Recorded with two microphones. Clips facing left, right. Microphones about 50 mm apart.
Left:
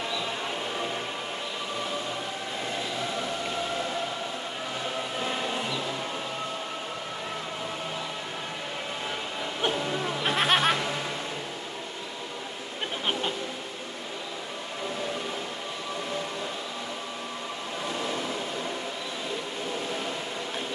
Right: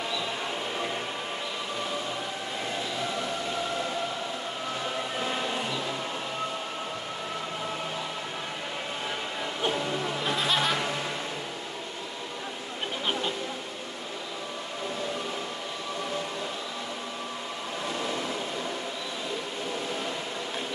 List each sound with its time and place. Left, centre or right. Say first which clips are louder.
10.2 s music: left 4 dB; left